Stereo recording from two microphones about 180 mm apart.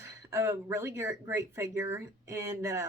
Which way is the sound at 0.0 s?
15° right (ahead or behind).